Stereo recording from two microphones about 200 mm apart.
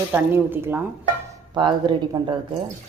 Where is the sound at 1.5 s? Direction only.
20° right (ahead or behind).